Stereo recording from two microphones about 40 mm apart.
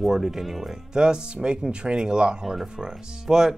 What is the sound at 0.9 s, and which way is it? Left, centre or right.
Speech, right.